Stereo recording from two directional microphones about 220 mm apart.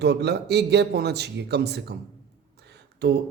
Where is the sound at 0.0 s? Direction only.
50° right (ahead or behind).